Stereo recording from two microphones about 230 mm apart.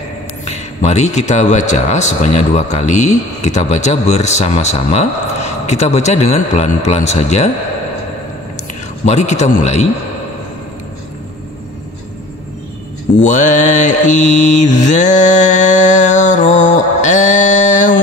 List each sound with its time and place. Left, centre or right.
0.5 s speech: left
9.0 s speech: left
13.2 s mantra: left